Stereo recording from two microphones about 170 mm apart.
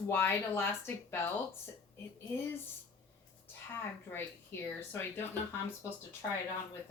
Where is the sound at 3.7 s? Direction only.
10° left (ahead or behind).